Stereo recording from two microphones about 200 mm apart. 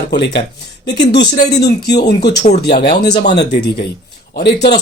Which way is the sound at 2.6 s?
55° left (ahead or behind).